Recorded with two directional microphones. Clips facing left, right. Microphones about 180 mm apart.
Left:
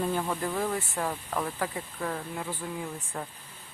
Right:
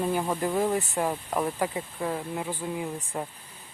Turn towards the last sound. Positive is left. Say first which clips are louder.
# right 4 dB
turn(degrees=-20)  # may be behind; listen again after turning